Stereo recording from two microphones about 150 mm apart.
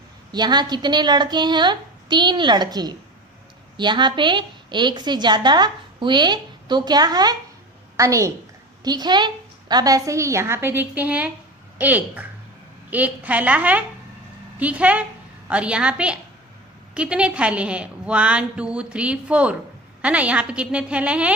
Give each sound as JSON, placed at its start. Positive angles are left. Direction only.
{"t": 0.3, "sound": "a woman's voice", "side_deg": -30}